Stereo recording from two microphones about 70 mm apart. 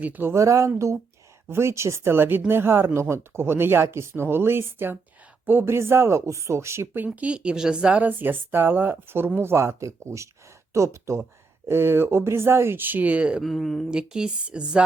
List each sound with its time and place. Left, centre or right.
0.0 s speech: right
0.3 s speech: right
7.0 s speech: centre
13.4 s speech: centre
13.9 s speech: centre